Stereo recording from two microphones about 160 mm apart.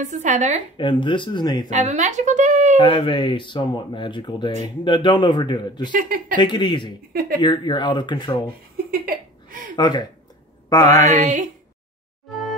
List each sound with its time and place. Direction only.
0.0 s speech: 50° right (ahead or behind)
0.7 s speech: 30° left (ahead or behind)
1.7 s speech: 50° right (ahead or behind)
2.8 s speech: 30° left (ahead or behind)
5.9 s speech: 60° right (ahead or behind)
6.3 s speech: 30° left (ahead or behind)
9.0 s a sound: 65° right (ahead or behind)
9.8 s speech: 30° left (ahead or behind)
11.1 s speech: 50° right (ahead or behind)